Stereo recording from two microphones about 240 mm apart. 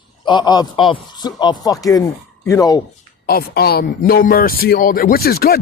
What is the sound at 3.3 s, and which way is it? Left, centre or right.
Speech, left.